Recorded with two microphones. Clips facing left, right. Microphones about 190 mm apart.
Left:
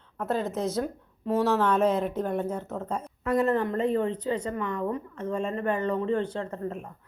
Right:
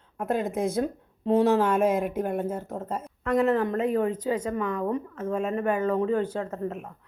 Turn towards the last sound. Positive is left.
turn(degrees=-5)  # may be behind; listen again after turning